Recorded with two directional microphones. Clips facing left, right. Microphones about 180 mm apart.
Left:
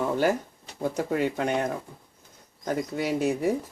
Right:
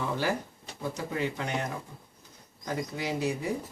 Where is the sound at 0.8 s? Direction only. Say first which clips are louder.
Left 6 dB; 50° left (ahead or behind).